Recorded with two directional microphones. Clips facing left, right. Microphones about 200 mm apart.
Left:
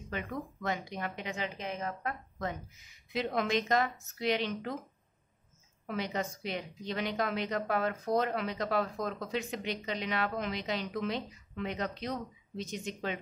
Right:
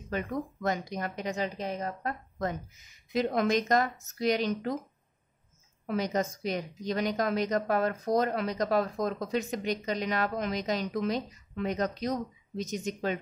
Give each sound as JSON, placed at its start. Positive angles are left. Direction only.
{"t": 0.1, "sound": "speech", "side_deg": -40}
{"t": 5.9, "sound": "speech", "side_deg": -40}